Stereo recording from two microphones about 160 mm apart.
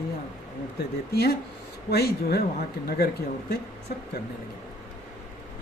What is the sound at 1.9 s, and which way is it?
Speech, 80° left.